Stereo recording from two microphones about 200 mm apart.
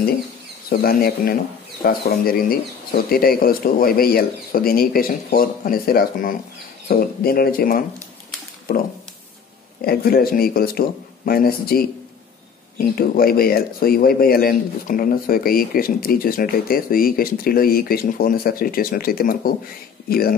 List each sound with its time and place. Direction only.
0.7 s speech: 50° left (ahead or behind)
9.8 s speech: 50° left (ahead or behind)